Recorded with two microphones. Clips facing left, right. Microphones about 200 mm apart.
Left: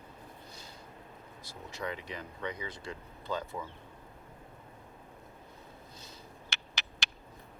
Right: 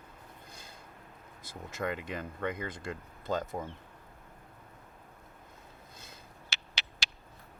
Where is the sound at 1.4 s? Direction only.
50° right (ahead or behind).